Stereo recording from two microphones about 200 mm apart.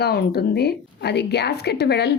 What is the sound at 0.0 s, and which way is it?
A woman's voice, 50° left (ahead or behind).